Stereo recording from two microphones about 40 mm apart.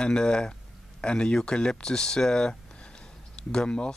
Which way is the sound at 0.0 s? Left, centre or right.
Left.